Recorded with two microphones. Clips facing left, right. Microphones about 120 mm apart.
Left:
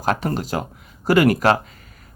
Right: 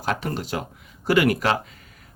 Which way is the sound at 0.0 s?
40° left (ahead or behind).